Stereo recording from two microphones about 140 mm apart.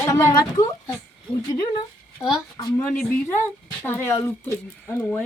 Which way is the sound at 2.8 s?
15° left (ahead or behind).